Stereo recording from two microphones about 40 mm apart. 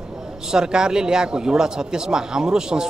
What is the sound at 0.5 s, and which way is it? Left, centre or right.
A man's voice, centre.